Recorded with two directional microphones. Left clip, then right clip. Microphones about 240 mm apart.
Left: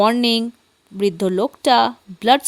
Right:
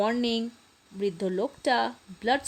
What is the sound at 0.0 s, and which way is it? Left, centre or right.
A woman's voice, left.